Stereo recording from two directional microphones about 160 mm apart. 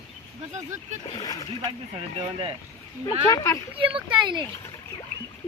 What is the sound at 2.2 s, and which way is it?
Speech, 30° right (ahead or behind).